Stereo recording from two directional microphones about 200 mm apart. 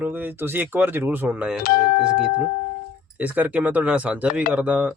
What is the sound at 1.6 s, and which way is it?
Speech, 45° left (ahead or behind).